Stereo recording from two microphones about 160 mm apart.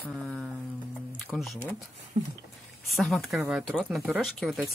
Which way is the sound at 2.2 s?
45° right (ahead or behind).